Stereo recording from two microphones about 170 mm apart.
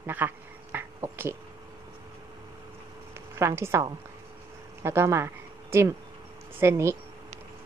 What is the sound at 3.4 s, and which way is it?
Speech, 15° right (ahead or behind).